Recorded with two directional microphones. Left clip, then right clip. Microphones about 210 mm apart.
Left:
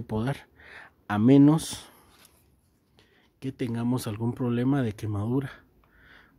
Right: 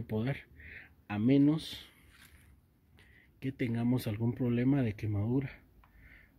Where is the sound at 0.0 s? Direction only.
20° left (ahead or behind).